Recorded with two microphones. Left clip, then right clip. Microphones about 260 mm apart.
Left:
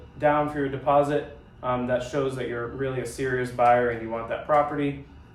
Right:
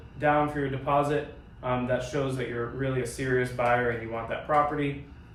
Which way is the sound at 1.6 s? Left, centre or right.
Centre.